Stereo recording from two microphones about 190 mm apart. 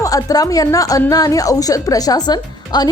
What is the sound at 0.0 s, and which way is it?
A woman's voice, 20° left (ahead or behind).